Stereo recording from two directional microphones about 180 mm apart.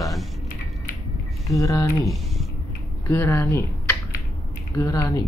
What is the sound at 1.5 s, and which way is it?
Speech, 20° left (ahead or behind).